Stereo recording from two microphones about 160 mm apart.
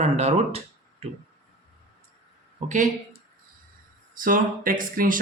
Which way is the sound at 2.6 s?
50° right (ahead or behind).